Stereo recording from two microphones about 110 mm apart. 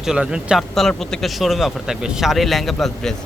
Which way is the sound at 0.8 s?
5° left (ahead or behind).